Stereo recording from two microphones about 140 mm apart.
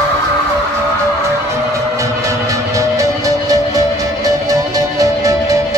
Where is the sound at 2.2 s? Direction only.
25° right (ahead or behind).